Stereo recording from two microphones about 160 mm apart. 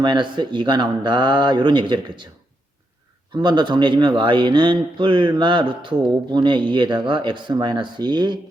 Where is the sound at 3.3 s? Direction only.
30° right (ahead or behind).